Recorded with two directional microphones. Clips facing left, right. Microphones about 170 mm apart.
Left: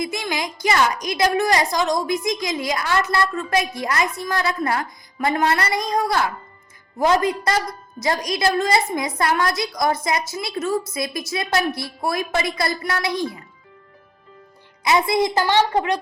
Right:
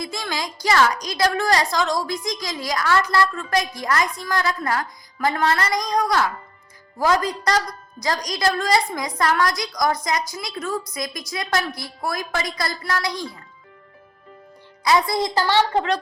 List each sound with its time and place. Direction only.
0.0 s a woman's voice: 20° left (ahead or behind)
14.8 s a woman's voice: 20° left (ahead or behind)